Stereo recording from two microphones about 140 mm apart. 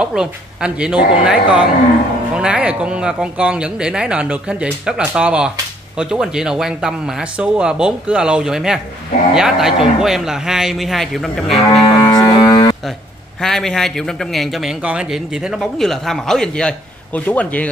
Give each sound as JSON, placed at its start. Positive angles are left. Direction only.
{"t": 0.0, "sound": "a man's voice", "side_deg": -5}
{"t": 12.1, "sound": "music", "side_deg": 30}
{"t": 13.4, "sound": "a man's voice", "side_deg": 5}